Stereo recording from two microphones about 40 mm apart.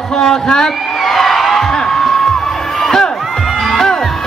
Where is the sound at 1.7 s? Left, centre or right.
Centre.